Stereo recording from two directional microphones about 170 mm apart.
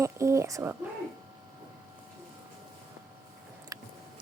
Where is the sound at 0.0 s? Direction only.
15° right (ahead or behind).